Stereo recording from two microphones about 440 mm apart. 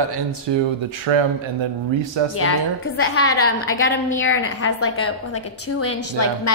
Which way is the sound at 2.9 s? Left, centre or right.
Left.